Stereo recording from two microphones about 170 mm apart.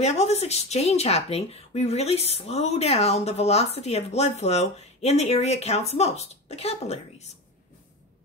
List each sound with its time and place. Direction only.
0.0 s speech: 40° left (ahead or behind)